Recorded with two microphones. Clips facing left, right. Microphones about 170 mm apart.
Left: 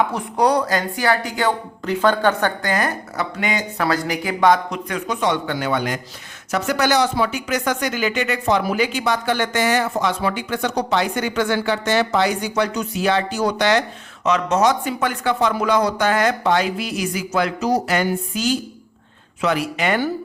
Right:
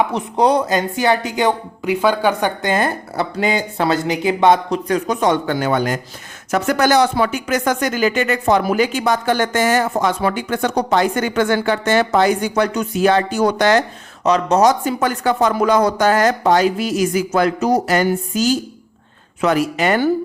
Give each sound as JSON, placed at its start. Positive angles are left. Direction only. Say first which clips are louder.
{"t": 0.1, "sound": "speech", "louder": "right 3 dB", "side_deg": -20}
{"t": 2.6, "sound": "speech", "louder": "right 3 dB", "side_deg": -25}
{"t": 14.3, "sound": "speech", "louder": "right 4 dB", "side_deg": -35}